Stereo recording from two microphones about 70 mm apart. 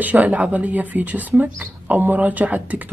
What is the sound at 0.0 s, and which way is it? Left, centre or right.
Speech, right.